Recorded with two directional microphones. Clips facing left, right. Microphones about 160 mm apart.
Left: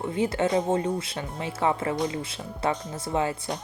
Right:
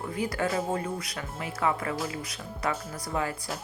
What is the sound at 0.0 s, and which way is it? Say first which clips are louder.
Speech: left 5 dB; 25° left (ahead or behind).